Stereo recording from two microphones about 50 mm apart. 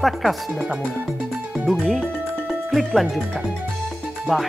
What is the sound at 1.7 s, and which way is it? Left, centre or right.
Speech, centre.